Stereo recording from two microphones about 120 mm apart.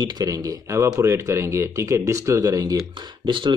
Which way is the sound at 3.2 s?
45° right (ahead or behind).